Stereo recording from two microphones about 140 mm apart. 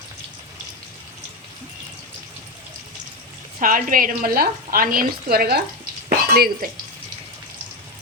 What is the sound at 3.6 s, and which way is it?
Speech, 75° right (ahead or behind).